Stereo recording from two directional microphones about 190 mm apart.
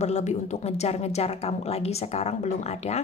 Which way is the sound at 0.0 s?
35° left (ahead or behind).